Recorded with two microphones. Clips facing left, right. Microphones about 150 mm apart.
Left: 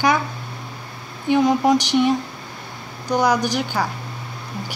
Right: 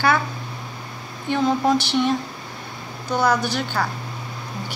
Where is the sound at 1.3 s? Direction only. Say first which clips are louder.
Left 3 dB; 15° left (ahead or behind).